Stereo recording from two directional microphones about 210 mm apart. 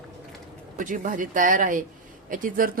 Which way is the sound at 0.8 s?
40° right (ahead or behind).